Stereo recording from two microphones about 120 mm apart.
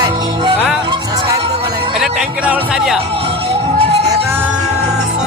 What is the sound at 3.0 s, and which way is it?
Music, 55° right (ahead or behind).